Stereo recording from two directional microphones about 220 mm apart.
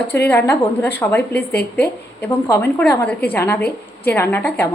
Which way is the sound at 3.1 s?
5° left (ahead or behind).